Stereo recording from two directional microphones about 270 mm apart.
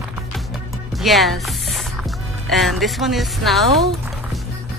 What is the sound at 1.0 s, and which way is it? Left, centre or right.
Music, centre.